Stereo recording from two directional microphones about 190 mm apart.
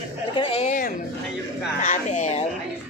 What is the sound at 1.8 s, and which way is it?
Speech, 40° left (ahead or behind).